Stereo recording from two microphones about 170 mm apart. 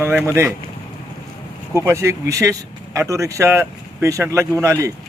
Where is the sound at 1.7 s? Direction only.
15° right (ahead or behind).